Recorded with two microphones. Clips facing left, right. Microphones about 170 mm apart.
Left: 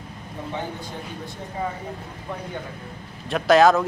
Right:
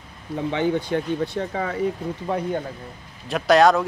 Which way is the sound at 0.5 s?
75° right (ahead or behind).